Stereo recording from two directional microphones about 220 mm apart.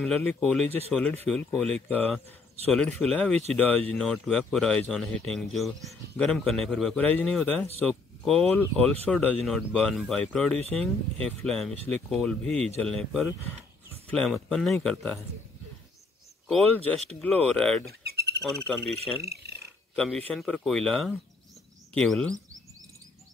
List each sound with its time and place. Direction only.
0.0 s speech: 5° left (ahead or behind)
0.7 s speech: 25° right (ahead or behind)
0.9 s speech: 5° left (ahead or behind)
16.4 s speech: 5° left (ahead or behind)
18.0 s owl: 45° right (ahead or behind)
20.0 s speech: 5° left (ahead or behind)